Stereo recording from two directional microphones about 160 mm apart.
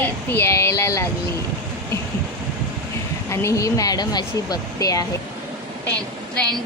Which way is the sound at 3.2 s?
20° left (ahead or behind).